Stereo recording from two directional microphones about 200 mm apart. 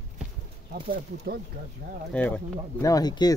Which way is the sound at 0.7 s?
50° right (ahead or behind).